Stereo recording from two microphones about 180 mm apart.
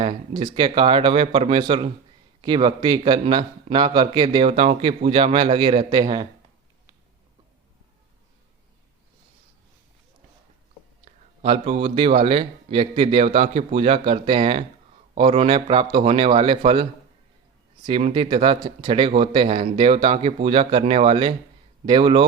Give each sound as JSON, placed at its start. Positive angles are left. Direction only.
{"t": 0.0, "sound": "a man's voice", "side_deg": -25}
{"t": 11.0, "sound": "a man's voice", "side_deg": -35}
{"t": 17.8, "sound": "a man's voice", "side_deg": -30}